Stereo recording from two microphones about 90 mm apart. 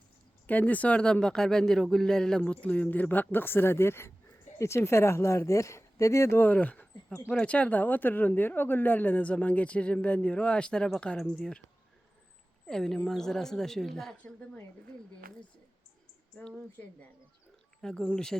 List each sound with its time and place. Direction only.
0.4 s speech: 20° left (ahead or behind)
6.4 s speech: 15° left (ahead or behind)
12.6 s a woman's voice: 5° left (ahead or behind)
17.8 s speech: 10° left (ahead or behind)